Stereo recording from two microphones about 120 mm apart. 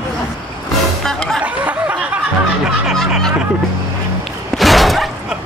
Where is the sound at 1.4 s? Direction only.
10° right (ahead or behind).